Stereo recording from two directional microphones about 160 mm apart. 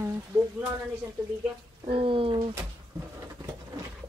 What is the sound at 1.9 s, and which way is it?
Speech, 35° right (ahead or behind).